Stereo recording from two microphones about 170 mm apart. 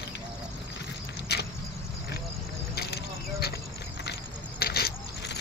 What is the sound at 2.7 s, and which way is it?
Vehicle, 70° left (ahead or behind).